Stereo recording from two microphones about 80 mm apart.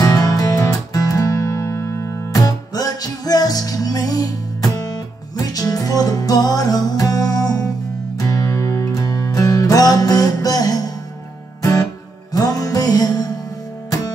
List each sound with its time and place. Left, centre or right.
0.0 s music: left
2.4 s music: left
12.3 s music: left